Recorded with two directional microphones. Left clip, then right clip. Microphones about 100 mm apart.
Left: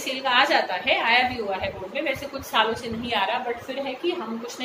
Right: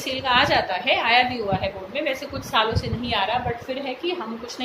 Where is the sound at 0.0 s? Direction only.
55° right (ahead or behind).